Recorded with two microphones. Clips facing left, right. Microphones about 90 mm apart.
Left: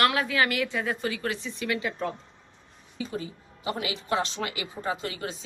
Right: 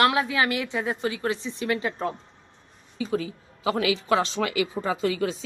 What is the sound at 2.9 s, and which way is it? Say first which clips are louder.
Speech: right 6 dB; 90° right.